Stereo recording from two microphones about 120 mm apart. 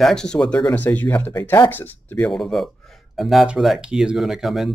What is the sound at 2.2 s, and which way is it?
A man's voice, 5° left (ahead or behind).